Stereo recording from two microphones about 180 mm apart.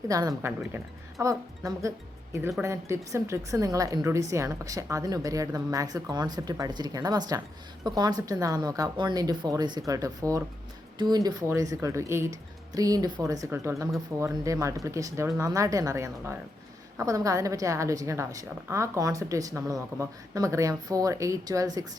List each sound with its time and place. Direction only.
0.1 s a woman's voice: 20° right (ahead or behind)